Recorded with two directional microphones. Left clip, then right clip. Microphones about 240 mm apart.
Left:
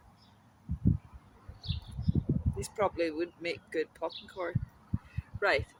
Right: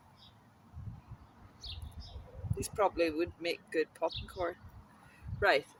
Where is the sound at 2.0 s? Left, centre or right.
Right.